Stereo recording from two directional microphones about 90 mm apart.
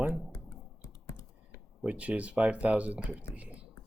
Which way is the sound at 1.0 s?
30° left (ahead or behind).